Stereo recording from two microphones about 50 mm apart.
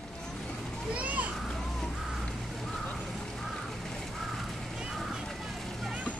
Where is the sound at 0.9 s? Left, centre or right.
Right.